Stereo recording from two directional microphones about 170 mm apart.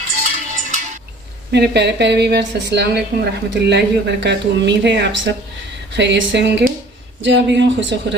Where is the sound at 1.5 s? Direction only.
85° right.